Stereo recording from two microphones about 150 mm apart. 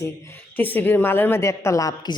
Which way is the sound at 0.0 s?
15° left (ahead or behind).